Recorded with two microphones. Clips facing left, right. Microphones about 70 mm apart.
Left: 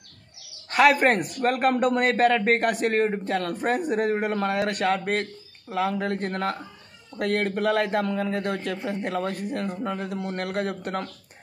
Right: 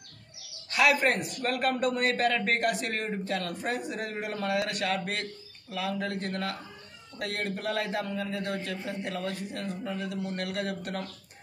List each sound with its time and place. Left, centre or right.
0.7 s speech: left